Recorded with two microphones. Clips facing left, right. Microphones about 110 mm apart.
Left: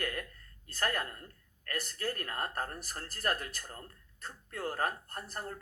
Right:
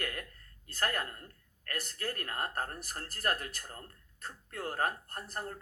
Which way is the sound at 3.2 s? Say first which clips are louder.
Even; 35° left (ahead or behind).